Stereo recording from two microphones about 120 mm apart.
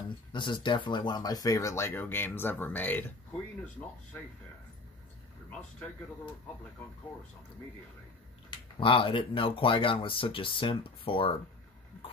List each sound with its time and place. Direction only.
0.3 s speech: 40° left (ahead or behind); by 3.1 s 15° left (ahead or behind)
8.7 s speech: 45° left (ahead or behind)